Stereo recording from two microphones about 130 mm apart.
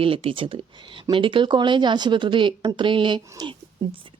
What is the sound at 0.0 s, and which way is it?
A woman's voice, 45° right (ahead or behind).